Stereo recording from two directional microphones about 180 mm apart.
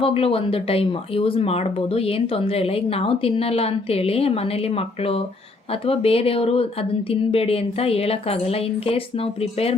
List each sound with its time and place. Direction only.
0.0 s speech: 30° left (ahead or behind)